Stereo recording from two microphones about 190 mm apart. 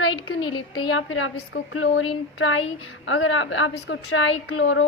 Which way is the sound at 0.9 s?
90° left.